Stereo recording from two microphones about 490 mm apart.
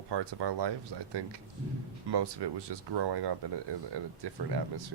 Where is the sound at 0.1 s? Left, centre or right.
Right.